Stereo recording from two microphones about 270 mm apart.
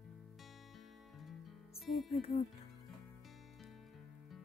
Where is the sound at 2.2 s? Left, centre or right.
Left.